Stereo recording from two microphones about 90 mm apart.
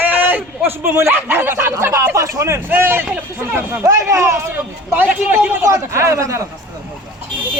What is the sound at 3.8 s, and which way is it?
Speech, 35° right (ahead or behind).